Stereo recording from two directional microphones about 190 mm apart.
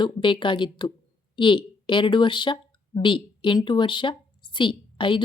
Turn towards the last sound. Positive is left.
turn(degrees=25)  # may be behind; listen again after turning